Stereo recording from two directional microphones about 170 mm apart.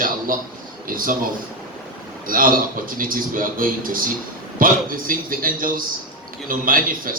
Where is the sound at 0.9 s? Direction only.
55° right (ahead or behind).